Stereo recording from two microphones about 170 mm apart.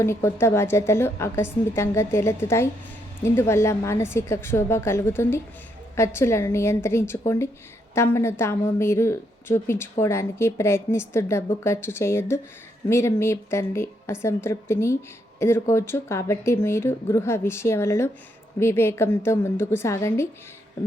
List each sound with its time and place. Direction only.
0.0 s speech: 15° left (ahead or behind)